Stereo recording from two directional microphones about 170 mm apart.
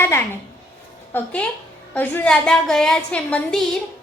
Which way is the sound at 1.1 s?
5° left (ahead or behind).